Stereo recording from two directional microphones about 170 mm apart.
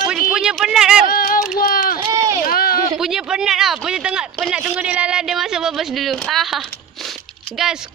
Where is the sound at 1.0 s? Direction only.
55° left (ahead or behind).